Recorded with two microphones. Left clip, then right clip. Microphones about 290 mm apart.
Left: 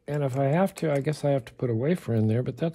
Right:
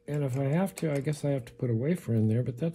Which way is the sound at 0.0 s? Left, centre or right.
Left.